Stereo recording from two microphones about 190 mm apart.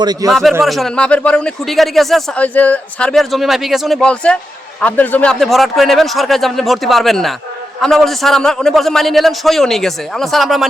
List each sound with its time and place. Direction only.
0.0 s speech: 20° right (ahead or behind)
0.3 s speech: centre (ahead or behind)